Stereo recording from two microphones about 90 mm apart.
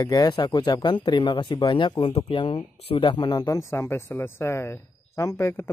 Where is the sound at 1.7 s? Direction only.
60° left (ahead or behind); by 3.2 s 85° left.